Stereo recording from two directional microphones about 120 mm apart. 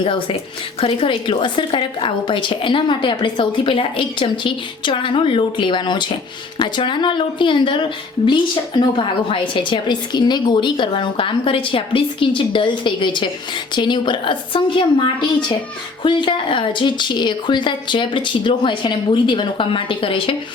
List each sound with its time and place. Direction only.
0.0 s a woman's voice: 45° left (ahead or behind)
16.0 s a woman's voice: 45° left (ahead or behind)